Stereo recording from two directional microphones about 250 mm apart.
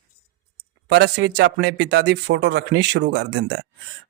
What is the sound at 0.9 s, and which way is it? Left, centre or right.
A man's voice, right.